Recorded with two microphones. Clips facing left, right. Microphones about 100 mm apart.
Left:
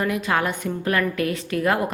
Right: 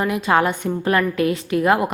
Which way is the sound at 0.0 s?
25° right (ahead or behind).